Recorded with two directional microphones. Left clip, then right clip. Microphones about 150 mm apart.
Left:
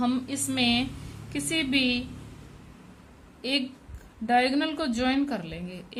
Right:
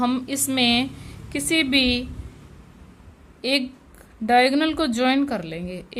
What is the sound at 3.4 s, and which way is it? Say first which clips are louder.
A woman's voice: right 6 dB; 45° right (ahead or behind).